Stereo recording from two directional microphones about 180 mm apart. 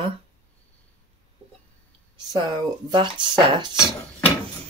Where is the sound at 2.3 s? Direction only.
25° right (ahead or behind).